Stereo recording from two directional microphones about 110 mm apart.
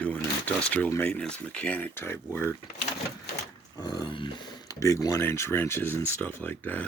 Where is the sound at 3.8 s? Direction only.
40° left (ahead or behind).